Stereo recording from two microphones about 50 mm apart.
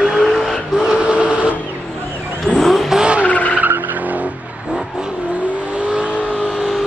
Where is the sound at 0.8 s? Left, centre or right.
Right.